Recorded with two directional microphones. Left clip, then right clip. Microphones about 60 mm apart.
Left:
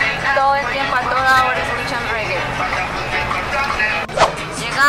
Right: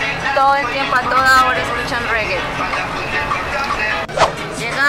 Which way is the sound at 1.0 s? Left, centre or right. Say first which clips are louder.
Right 3 dB; centre.